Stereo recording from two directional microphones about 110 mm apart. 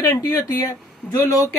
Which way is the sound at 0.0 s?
30° left (ahead or behind).